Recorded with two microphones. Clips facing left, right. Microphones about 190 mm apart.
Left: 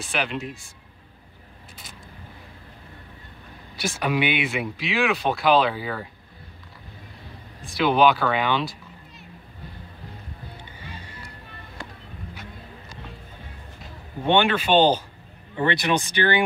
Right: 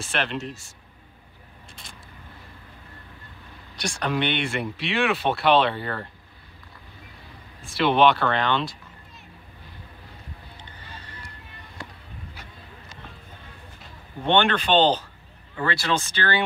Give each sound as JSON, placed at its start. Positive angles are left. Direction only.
{"t": 0.0, "sound": "speech", "side_deg": 0}
{"t": 3.7, "sound": "speech", "side_deg": 5}
{"t": 7.7, "sound": "speech", "side_deg": 0}
{"t": 10.6, "sound": "music", "side_deg": 10}
{"t": 14.2, "sound": "speech", "side_deg": 10}
{"t": 15.5, "sound": "speech", "side_deg": 20}